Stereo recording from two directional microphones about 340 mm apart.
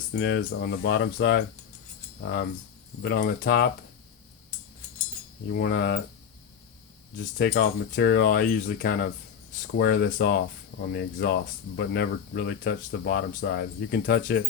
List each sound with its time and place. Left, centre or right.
0.1 s speech: left
3.0 s speech: left
5.5 s speech: left
7.3 s speech: left